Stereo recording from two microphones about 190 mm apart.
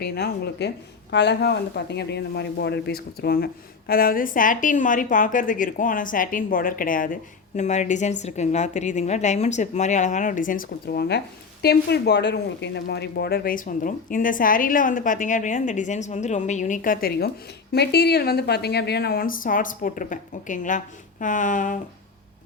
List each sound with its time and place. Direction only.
0.0 s speech: 60° left (ahead or behind); by 21.8 s 45° left (ahead or behind)